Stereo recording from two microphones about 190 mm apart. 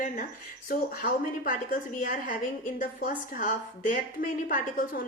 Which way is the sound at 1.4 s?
50° left (ahead or behind).